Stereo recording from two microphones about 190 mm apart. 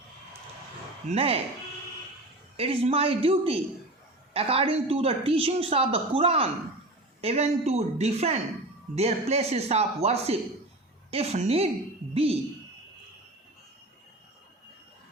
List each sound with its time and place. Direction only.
1.0 s speech: 30° right (ahead or behind)
2.6 s speech: 30° right (ahead or behind)